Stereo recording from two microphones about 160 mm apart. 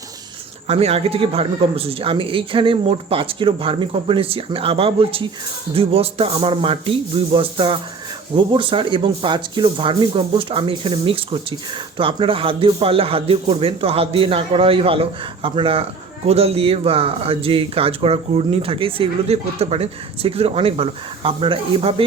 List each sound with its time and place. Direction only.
0.7 s speech: 40° right (ahead or behind)